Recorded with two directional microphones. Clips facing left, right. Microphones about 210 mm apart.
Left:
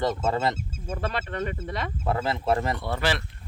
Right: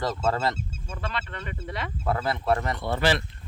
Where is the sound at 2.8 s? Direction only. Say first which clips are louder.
Right 7 dB; 25° right (ahead or behind).